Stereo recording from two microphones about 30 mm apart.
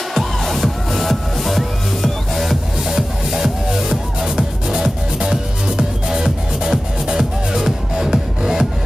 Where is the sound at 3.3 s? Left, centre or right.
Centre.